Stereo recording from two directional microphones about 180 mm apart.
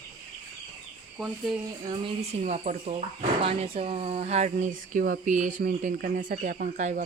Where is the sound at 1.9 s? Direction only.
35° right (ahead or behind).